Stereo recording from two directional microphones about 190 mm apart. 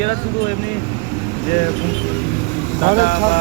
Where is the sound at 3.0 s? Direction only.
45° left (ahead or behind).